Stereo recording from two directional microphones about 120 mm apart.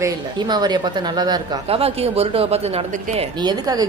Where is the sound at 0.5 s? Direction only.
35° right (ahead or behind).